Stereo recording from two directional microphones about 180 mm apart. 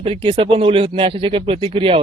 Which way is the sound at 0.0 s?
30° right (ahead or behind).